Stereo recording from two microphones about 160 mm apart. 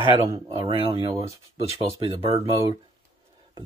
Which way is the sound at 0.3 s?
30° right (ahead or behind).